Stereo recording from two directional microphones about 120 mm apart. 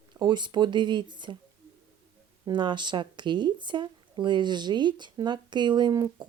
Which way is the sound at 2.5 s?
40° right (ahead or behind).